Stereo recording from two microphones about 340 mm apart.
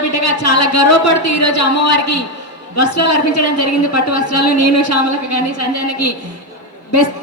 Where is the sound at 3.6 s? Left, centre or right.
Left.